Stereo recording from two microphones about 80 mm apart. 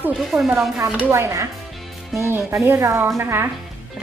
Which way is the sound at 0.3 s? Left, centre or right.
Centre.